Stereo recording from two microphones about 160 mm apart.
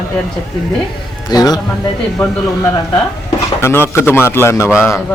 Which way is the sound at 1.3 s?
25° left (ahead or behind).